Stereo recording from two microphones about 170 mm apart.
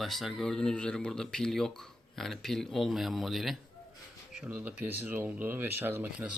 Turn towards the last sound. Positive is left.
turn(degrees=-15)  # may be behind; listen again after turning